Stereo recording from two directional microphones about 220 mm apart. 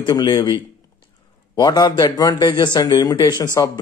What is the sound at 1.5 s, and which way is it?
Speech, 20° left (ahead or behind).